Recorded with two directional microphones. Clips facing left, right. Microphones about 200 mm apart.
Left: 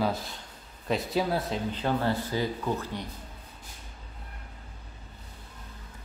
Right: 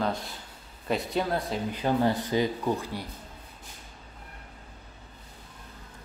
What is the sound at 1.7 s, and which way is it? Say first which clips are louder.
Speech: right 4 dB; 15° right (ahead or behind).